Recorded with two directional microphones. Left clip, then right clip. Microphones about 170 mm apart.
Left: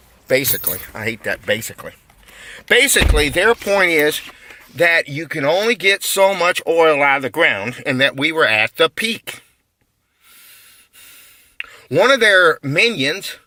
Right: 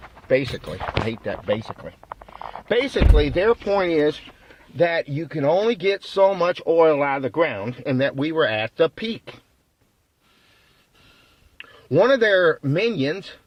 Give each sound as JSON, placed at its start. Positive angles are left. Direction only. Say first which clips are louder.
{"t": 0.3, "sound": "speech", "louder": "left 3 dB", "side_deg": 25}
{"t": 12.1, "sound": "speech", "louder": "left 5 dB", "side_deg": 10}